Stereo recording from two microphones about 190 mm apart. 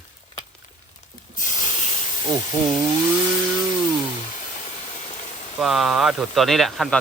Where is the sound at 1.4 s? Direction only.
40° left (ahead or behind).